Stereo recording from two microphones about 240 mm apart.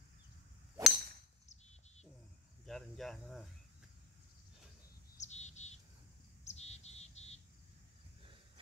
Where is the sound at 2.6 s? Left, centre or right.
Centre.